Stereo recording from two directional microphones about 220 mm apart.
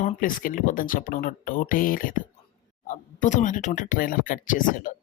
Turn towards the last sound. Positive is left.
turn(degrees=35)  # may be behind; listen again after turning